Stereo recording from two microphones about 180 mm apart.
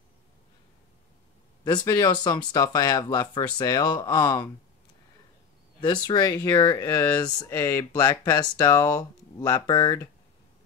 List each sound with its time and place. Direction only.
1.6 s speech: 20° left (ahead or behind)
6.0 s speech: 20° left (ahead or behind)